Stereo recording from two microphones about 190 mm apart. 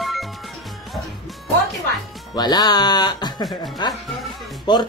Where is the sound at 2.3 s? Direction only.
20° left (ahead or behind).